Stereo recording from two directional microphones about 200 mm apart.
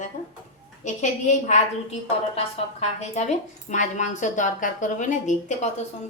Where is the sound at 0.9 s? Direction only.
35° left (ahead or behind).